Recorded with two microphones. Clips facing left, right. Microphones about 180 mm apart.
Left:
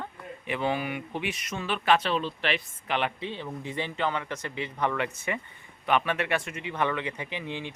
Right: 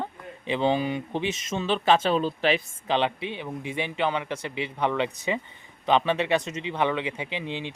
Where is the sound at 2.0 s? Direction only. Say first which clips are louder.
Right 5 dB; 45° right (ahead or behind).